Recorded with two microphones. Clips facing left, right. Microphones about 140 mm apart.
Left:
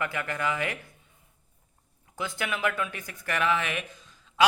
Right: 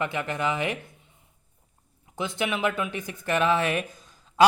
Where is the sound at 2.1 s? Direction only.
20° right (ahead or behind).